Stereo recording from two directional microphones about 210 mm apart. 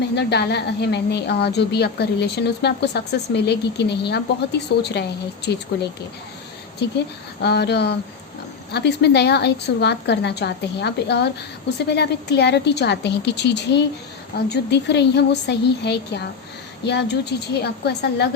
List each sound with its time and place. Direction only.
0.2 s a woman's voice: 50° left (ahead or behind)
7.4 s a woman's voice: 50° left (ahead or behind)